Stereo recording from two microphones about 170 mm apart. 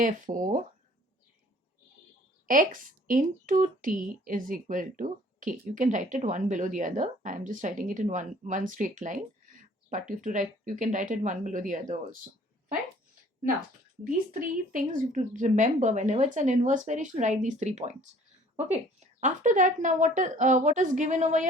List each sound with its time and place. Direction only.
0.0 s speech: 50° right (ahead or behind)
3.1 s speech: 50° right (ahead or behind)
14.0 s speech: 55° right (ahead or behind)